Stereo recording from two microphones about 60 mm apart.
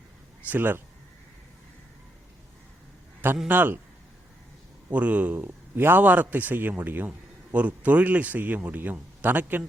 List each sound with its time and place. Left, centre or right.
0.4 s speech: right
3.5 s speech: right
4.9 s speech: right